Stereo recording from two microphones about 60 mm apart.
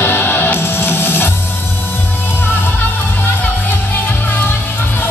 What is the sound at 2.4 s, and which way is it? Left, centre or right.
Music, left.